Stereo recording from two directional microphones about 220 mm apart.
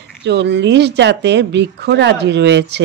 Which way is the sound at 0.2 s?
50° right (ahead or behind).